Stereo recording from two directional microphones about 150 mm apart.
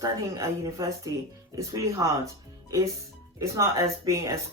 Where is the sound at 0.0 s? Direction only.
25° right (ahead or behind).